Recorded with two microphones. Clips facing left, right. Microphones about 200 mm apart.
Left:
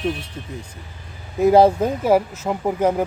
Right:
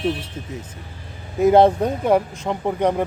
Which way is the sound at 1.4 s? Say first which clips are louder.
Even; centre (ahead or behind).